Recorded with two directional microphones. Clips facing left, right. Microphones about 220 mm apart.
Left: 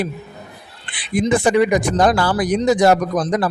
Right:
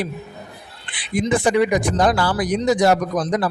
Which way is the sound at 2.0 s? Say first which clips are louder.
Left 2 dB; 45° left (ahead or behind).